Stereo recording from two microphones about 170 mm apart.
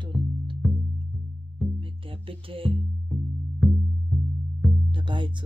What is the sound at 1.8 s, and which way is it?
Music, 30° right (ahead or behind).